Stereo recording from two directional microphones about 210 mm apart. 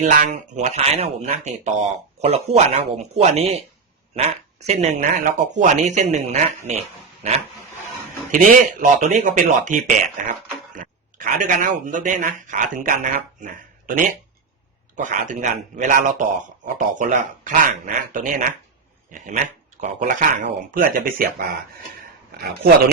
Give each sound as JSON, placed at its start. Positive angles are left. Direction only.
{"t": 0.0, "sound": "speech", "side_deg": -35}
{"t": 8.3, "sound": "speech", "side_deg": -40}